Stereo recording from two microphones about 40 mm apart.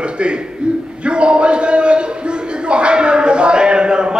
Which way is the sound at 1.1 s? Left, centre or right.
Right.